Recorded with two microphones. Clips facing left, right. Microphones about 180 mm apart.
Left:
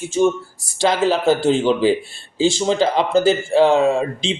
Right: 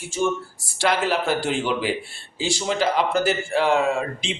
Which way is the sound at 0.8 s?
25° left (ahead or behind).